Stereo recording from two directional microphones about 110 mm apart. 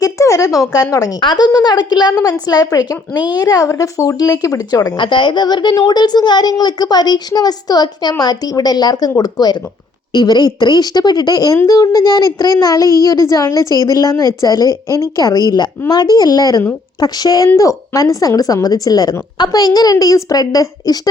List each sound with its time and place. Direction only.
0.0 s a woman's voice: 30° left (ahead or behind)